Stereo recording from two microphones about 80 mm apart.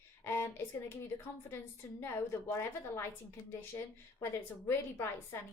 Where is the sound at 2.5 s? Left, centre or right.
Left.